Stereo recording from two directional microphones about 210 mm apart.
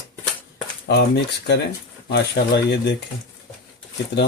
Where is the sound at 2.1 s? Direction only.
50° left (ahead or behind).